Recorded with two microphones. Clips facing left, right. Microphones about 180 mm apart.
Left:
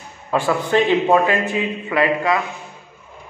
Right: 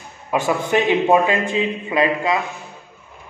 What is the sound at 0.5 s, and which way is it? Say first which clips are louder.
A man's voice: left 1 dB; 15° right (ahead or behind).